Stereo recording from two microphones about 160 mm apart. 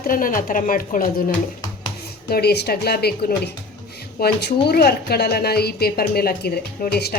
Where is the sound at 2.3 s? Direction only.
90° left.